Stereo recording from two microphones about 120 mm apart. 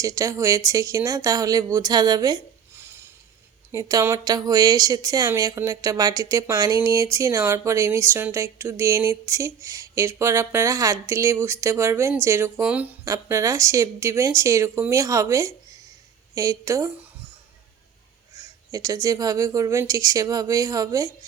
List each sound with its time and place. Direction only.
0.0 s speech: 25° right (ahead or behind)
2.7 s a sound: 20° right (ahead or behind)
3.7 s speech: 30° right (ahead or behind)
13.1 s speech: 25° right (ahead or behind)
18.7 s speech: 30° right (ahead or behind)